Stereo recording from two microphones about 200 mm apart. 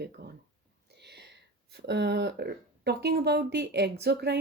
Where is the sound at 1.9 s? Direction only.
60° right (ahead or behind).